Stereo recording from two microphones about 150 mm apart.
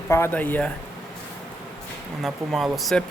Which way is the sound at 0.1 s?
15° left (ahead or behind).